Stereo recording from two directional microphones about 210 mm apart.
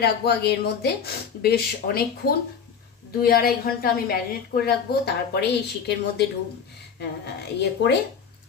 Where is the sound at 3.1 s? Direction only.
45° left (ahead or behind).